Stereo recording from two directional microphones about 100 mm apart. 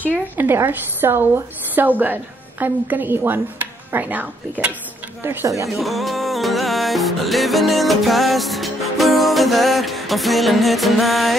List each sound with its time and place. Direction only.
0.1 s a woman's voice: 20° right (ahead or behind)
5.8 s music: centre (ahead or behind)